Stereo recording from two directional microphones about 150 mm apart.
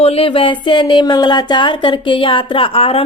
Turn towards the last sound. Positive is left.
turn(degrees=40)  # may be behind; listen again after turning